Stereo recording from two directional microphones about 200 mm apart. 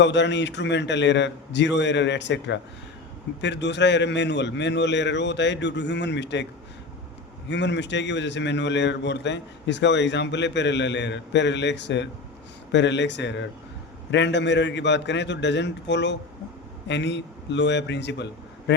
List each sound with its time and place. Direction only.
0.0 s a man's voice: 60° left (ahead or behind)